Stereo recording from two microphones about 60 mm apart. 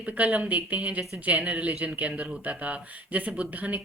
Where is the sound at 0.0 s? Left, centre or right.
Right.